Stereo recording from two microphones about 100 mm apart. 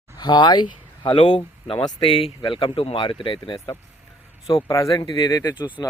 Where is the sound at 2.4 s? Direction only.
55° left (ahead or behind).